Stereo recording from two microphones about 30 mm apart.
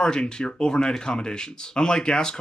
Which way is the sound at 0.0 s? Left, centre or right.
Left.